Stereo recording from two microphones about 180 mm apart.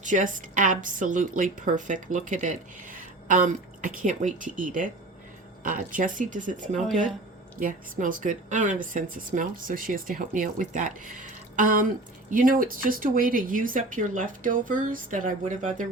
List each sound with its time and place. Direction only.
0.0 s a woman's voice: 45° right (ahead or behind)